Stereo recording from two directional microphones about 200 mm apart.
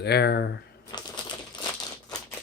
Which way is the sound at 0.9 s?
20° left (ahead or behind).